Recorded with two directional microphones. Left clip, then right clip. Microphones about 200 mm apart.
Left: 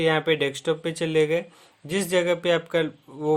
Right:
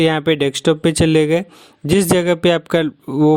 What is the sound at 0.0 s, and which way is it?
Speech, 45° right (ahead or behind).